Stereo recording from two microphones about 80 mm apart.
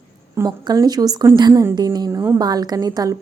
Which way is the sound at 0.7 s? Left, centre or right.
Right.